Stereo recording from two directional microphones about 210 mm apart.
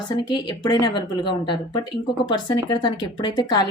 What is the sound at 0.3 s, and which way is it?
A woman's voice, 20° left (ahead or behind).